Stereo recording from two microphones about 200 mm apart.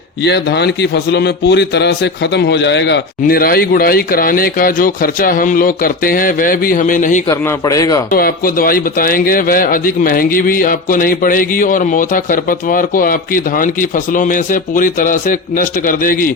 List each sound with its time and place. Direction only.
0.3 s a man's voice: 55° left (ahead or behind); by 7.2 s 40° left (ahead or behind)
7.3 s a man's voice: 15° left (ahead or behind)
8.1 s a man's voice: 45° left (ahead or behind)